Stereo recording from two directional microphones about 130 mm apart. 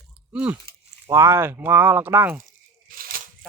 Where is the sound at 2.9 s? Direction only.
90° right.